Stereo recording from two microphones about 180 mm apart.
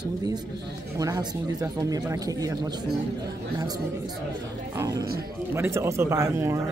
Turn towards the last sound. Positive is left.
turn(degrees=-15)  # may be behind; listen again after turning